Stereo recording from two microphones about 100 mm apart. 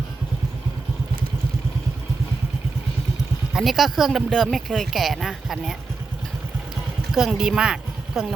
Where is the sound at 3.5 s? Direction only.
Centre (ahead or behind).